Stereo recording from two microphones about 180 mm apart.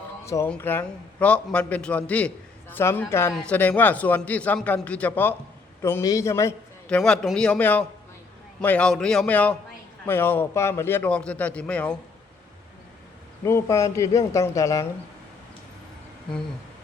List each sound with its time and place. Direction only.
0.3 s a man's voice: 10° left (ahead or behind)
6.9 s a man's voice: 5° left (ahead or behind)
13.4 s a man's voice: 15° left (ahead or behind)